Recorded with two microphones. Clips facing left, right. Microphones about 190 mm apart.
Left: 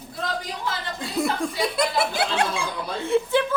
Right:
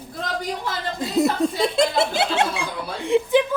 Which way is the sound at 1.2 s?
25° right (ahead or behind).